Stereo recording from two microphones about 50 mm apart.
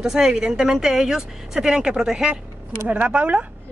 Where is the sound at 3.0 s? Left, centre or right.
Right.